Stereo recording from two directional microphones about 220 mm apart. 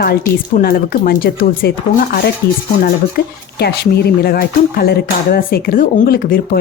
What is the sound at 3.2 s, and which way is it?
Speech, 45° left (ahead or behind).